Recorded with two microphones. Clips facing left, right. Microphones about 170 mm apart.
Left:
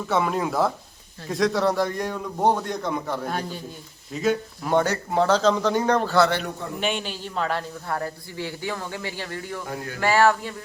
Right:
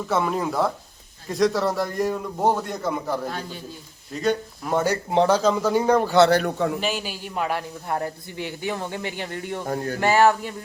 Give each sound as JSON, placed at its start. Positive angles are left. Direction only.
{"t": 0.1, "sound": "a man's voice", "side_deg": 0}
{"t": 9.6, "sound": "speech", "side_deg": -40}
{"t": 10.0, "sound": "a man's voice", "side_deg": -20}